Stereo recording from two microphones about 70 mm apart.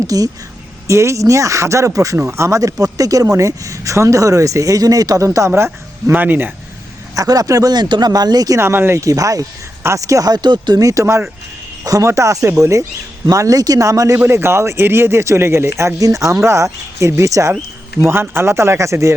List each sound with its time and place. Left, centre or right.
0.1 s speech: right
0.9 s speech: right
5.5 s speech: right
7.2 s speech: right
7.7 s speech: right
8.5 s speech: right
9.0 s speech: right
11.0 s speech: right
11.8 s speech: right
12.0 s speech: right
13.3 s speech: right
14.3 s speech: right
18.0 s speech: right